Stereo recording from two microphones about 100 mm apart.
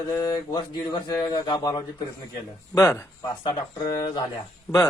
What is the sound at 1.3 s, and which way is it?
Speech, 45° left (ahead or behind).